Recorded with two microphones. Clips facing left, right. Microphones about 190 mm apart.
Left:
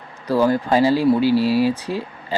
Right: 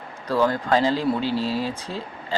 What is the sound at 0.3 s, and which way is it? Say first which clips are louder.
Speech: left 4 dB; 10° left (ahead or behind).